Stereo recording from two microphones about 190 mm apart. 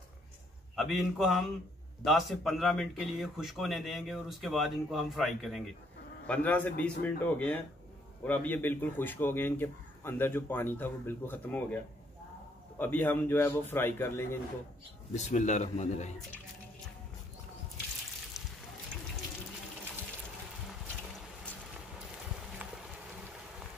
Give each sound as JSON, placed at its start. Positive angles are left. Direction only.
{"t": 0.7, "sound": "a man's voice", "side_deg": 0}
{"t": 15.1, "sound": "a man's voice", "side_deg": 40}